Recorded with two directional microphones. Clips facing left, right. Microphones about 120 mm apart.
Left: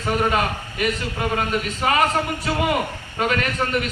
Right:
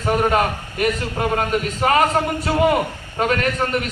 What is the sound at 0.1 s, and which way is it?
A man's voice, 45° right (ahead or behind).